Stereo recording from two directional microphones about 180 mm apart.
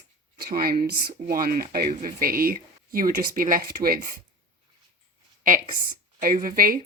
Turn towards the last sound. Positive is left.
turn(degrees=-50)  # may be behind; listen again after turning